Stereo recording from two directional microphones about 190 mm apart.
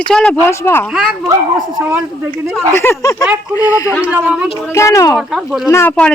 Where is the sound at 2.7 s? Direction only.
10° left (ahead or behind).